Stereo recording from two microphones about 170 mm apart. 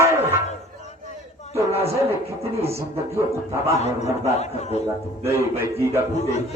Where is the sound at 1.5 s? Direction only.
15° right (ahead or behind).